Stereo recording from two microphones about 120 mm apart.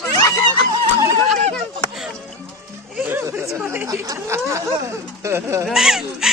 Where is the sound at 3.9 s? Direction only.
25° right (ahead or behind).